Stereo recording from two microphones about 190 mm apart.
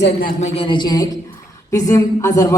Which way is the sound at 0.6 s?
25° left (ahead or behind).